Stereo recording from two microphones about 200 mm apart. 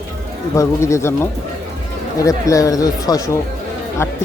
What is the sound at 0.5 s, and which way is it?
Speech, 15° left (ahead or behind).